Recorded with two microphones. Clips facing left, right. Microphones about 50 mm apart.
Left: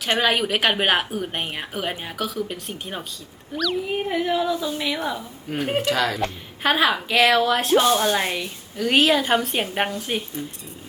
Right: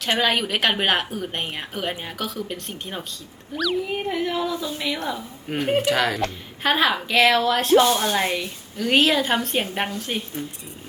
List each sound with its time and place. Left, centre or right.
0.0 s a woman's voice: centre
3.9 s a woman's voice: centre
5.8 s speech: right
6.1 s a woman's voice: centre